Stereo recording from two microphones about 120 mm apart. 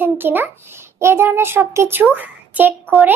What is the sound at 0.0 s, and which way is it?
A child's voice, 15° right (ahead or behind).